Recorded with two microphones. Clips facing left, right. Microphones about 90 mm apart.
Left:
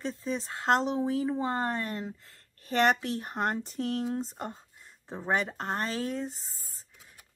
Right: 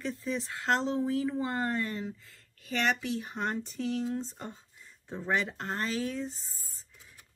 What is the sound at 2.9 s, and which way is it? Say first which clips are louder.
Speech: left 1 dB; 60° left (ahead or behind).